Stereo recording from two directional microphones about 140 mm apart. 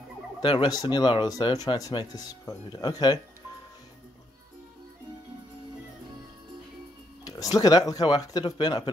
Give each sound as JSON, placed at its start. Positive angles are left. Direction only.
{"t": 0.4, "sound": "speech", "side_deg": 35}
{"t": 7.2, "sound": "speech", "side_deg": 25}